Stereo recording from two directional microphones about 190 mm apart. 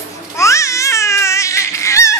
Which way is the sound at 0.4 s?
15° left (ahead or behind).